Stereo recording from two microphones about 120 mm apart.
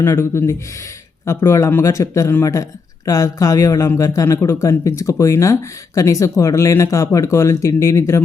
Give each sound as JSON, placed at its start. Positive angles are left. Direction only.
{"t": 0.0, "sound": "a man's voice", "side_deg": 20}